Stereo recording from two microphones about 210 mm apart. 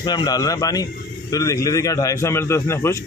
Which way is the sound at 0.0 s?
20° left (ahead or behind).